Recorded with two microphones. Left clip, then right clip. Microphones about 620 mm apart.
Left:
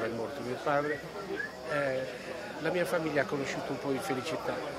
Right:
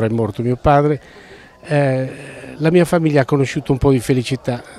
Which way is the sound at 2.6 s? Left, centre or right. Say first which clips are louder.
Right 16 dB; right.